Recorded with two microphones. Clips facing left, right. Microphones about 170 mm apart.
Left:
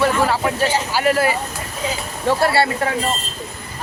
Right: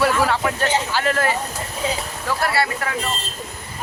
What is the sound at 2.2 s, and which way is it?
Speech, 30° left (ahead or behind).